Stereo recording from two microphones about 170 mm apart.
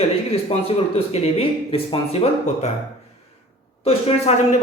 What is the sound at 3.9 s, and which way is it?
Speech, 35° left (ahead or behind).